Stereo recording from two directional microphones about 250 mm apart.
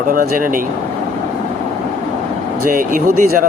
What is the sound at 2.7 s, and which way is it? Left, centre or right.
Speech, right.